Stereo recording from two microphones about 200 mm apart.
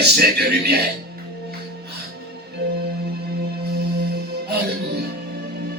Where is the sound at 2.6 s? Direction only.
55° right (ahead or behind).